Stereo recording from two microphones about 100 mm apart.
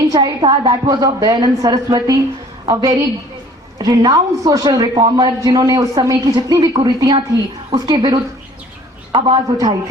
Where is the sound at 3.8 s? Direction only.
40° right (ahead or behind).